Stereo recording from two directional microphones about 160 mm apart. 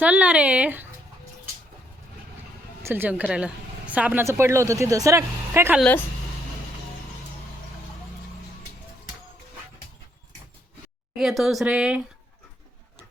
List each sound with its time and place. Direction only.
0.0 s a woman's voice: 10° right (ahead or behind)
2.8 s a woman's voice: 15° right (ahead or behind)
11.2 s speech: centre (ahead or behind)